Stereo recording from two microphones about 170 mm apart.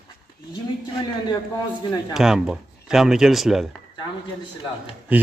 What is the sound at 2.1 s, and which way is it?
Speech, 5° right (ahead or behind).